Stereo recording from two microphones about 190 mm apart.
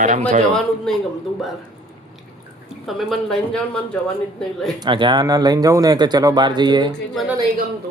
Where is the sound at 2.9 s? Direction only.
Centre (ahead or behind).